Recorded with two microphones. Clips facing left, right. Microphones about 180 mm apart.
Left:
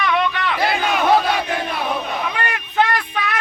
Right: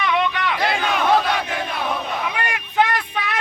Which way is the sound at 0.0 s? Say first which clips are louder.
Left 1 dB; 20° right (ahead or behind).